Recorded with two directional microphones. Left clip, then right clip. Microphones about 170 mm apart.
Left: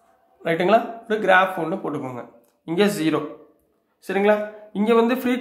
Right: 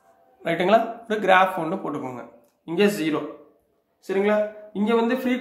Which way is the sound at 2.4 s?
30° left (ahead or behind).